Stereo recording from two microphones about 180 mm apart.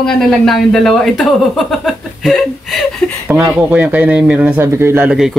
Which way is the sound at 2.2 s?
Centre (ahead or behind).